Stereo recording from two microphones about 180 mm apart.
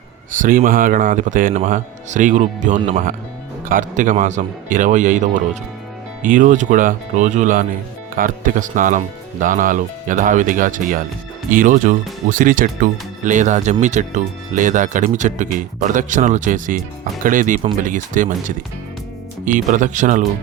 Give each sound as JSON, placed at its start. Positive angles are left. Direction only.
{"t": 0.3, "sound": "speech", "side_deg": -50}